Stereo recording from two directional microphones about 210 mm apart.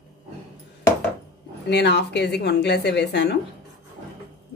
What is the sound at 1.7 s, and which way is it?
Speech, 55° left (ahead or behind).